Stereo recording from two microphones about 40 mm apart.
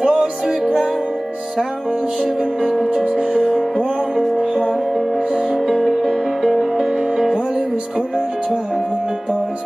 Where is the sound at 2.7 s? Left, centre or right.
Centre.